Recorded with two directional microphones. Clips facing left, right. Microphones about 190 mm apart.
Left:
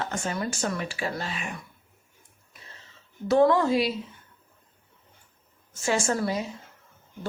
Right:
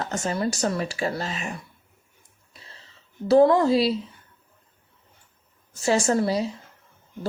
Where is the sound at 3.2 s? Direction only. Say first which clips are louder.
Right 4 dB; 35° right (ahead or behind).